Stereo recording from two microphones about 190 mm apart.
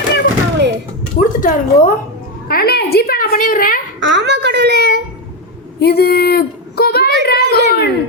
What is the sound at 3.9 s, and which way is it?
A child's voice, 75° right (ahead or behind).